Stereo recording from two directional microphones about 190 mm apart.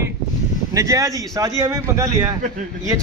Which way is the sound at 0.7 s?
15° right (ahead or behind).